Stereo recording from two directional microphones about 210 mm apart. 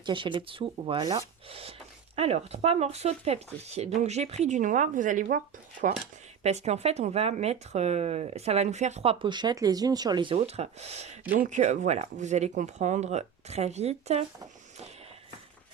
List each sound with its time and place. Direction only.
0.0 s speech: 25° right (ahead or behind); by 5.4 s 40° right (ahead or behind)
6.4 s speech: 30° right (ahead or behind)